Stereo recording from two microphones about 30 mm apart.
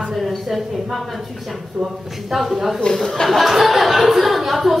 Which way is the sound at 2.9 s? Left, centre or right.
Centre.